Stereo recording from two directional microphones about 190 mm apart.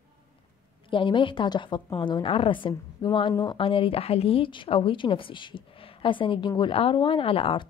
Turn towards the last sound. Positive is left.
turn(degrees=30)  # may be behind; listen again after turning